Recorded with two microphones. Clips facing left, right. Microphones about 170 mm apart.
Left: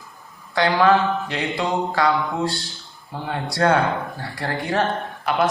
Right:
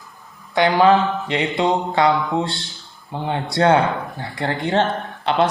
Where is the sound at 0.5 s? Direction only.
20° right (ahead or behind).